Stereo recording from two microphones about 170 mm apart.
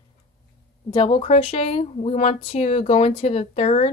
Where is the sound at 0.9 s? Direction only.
30° left (ahead or behind).